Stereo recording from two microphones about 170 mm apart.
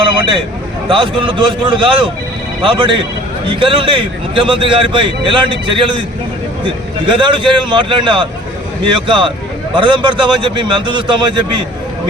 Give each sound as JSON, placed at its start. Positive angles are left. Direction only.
{"t": 0.9, "sound": "a man's voice", "side_deg": -30}
{"t": 7.0, "sound": "a man's voice", "side_deg": -30}